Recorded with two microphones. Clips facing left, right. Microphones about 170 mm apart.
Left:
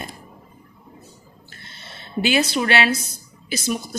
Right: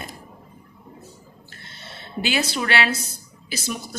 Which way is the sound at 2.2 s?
20° left (ahead or behind).